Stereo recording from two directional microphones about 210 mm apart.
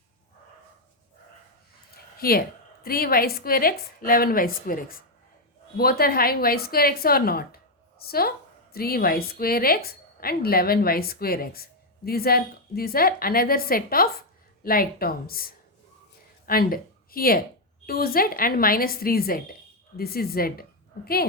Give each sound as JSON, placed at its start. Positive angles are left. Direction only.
{"t": 2.1, "sound": "a woman's voice", "side_deg": 45}